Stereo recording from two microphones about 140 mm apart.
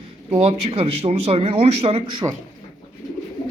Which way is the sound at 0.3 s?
45° right (ahead or behind).